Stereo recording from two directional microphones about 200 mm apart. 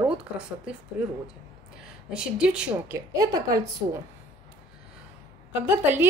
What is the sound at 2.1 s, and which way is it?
Speech, 5° right (ahead or behind).